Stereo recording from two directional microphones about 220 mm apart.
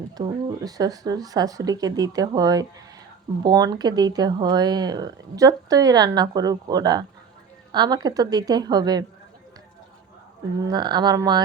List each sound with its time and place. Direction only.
0.2 s speech: 15° right (ahead or behind)
10.7 s speech: 20° right (ahead or behind)